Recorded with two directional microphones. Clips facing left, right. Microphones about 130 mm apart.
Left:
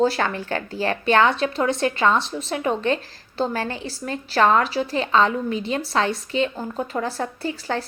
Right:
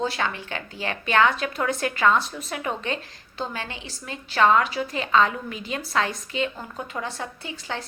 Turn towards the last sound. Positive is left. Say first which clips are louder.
# left 7 dB
turn(degrees=40)  # may be behind; listen again after turning